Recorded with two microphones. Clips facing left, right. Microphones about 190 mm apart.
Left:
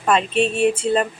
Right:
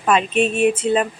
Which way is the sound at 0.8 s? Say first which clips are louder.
Right 1 dB; 5° right (ahead or behind).